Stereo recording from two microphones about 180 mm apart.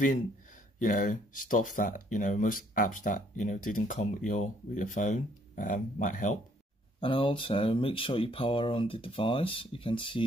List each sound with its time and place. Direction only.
0.7 s speech: 50° left (ahead or behind)
7.0 s speech: 30° left (ahead or behind)